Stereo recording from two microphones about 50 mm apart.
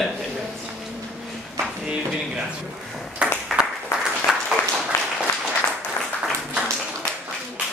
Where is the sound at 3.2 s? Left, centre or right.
Centre.